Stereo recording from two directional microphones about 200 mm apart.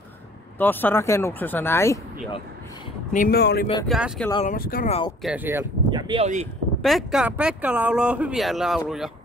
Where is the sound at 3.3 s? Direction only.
55° left (ahead or behind).